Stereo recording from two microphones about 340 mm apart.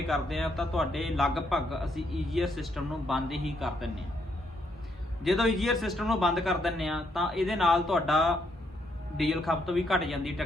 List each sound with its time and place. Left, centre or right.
0.1 s a man's voice: centre
5.2 s a man's voice: centre